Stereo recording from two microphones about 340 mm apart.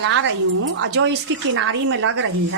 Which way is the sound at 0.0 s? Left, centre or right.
Right.